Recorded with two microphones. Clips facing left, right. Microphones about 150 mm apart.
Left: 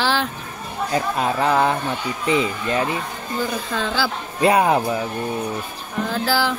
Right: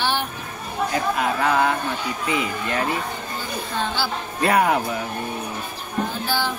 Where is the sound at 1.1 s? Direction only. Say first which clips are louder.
Left 3 dB; 30° left (ahead or behind).